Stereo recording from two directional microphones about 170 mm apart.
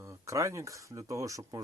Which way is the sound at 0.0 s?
15° right (ahead or behind).